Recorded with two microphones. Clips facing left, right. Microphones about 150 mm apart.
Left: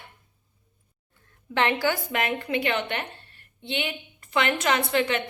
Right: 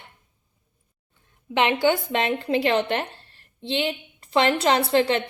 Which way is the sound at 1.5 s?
20° right (ahead or behind).